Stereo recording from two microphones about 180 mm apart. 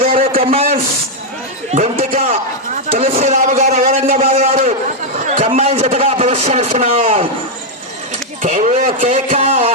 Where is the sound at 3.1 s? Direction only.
40° right (ahead or behind).